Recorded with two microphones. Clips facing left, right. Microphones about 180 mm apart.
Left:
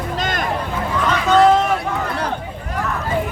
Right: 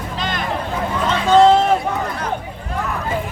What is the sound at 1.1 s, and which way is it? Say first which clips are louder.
Run: right 2 dB; 25° right (ahead or behind).